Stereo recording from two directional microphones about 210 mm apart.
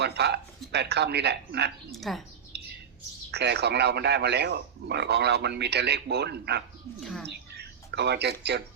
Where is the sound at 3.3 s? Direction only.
50° right (ahead or behind).